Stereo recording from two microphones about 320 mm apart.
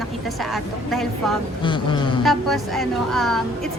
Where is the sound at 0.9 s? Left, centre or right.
Centre.